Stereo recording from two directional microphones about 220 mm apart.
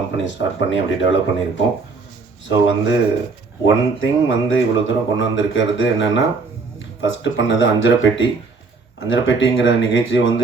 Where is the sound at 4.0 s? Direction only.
60° left (ahead or behind).